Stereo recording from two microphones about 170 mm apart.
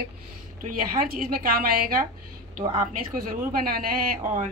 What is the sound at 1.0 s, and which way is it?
Speech, 60° right (ahead or behind).